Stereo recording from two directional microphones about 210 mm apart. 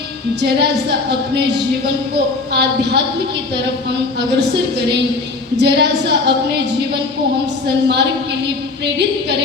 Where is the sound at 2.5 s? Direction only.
55° right (ahead or behind).